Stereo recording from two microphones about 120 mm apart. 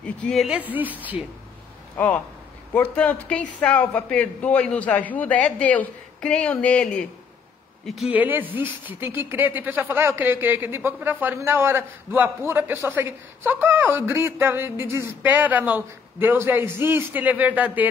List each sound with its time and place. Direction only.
0.0 s speech: 10° left (ahead or behind)
0.4 s speech: 10° right (ahead or behind)
2.0 s a man's voice: 10° left (ahead or behind)
8.1 s speech: 15° right (ahead or behind)